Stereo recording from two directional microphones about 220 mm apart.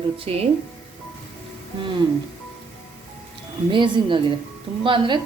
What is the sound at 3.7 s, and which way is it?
A woman's voice, 20° right (ahead or behind).